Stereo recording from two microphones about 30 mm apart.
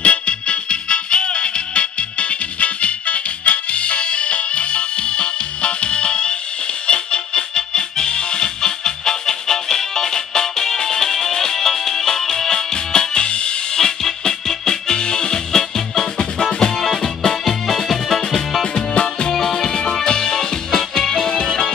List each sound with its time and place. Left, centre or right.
0.0 s music: left
13.7 s music: centre
18.6 s music: left